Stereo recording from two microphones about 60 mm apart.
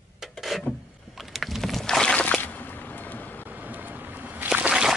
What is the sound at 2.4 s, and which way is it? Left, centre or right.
Whip, left.